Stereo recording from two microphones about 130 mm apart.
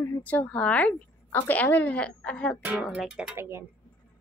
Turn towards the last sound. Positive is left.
turn(degrees=-20)  # may be behind; listen again after turning